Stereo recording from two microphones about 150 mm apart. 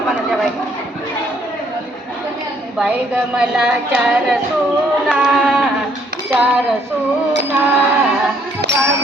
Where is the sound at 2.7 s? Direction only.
5° right (ahead or behind).